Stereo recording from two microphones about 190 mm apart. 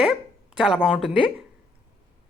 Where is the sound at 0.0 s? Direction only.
Centre (ahead or behind).